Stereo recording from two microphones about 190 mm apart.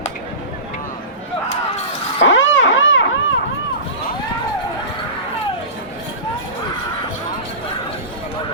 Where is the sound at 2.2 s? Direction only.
85° left.